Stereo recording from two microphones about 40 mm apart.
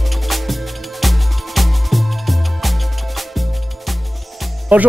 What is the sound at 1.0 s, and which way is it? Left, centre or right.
Music, centre.